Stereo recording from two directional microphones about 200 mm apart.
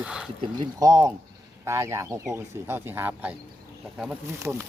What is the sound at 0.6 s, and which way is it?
A man's voice, 15° right (ahead or behind).